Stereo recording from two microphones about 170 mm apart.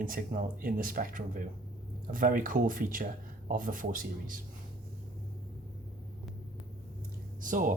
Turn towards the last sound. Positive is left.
turn(degrees=-50)  # may be behind; listen again after turning